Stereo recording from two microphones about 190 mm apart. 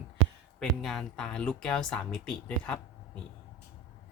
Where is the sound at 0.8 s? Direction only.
Centre (ahead or behind).